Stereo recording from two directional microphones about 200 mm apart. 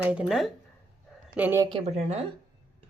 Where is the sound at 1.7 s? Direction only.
35° right (ahead or behind).